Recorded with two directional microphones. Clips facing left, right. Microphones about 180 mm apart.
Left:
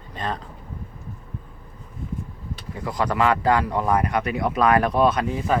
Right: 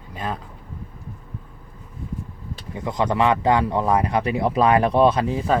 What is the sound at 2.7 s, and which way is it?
Speech, 20° right (ahead or behind).